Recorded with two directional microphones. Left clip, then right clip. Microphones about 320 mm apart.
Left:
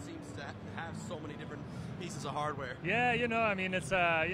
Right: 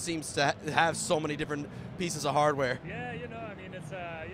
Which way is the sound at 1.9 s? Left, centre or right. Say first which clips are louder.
Right 11 dB; right.